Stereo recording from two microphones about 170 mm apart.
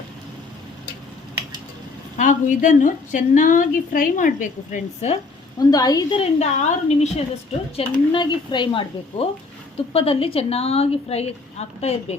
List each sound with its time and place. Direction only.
2.1 s a woman's voice: 50° left (ahead or behind)
5.5 s a woman's voice: 20° left (ahead or behind); by 12.1 s 40° left (ahead or behind)